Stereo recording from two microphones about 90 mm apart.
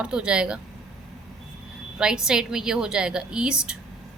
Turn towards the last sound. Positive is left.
turn(degrees=-10)  # may be behind; listen again after turning